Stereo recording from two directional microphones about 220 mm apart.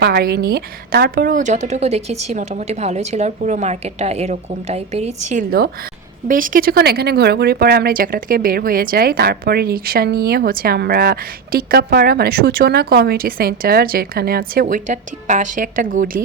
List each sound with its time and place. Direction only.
0.0 s a woman's voice: 45° right (ahead or behind)